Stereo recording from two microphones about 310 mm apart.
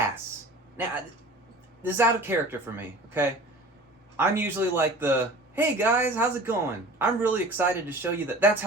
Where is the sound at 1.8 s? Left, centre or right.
Centre.